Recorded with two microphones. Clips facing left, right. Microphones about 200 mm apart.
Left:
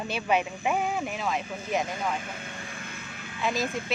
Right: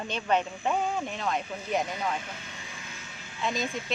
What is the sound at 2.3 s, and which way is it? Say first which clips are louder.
Music: left 4 dB; 55° left (ahead or behind).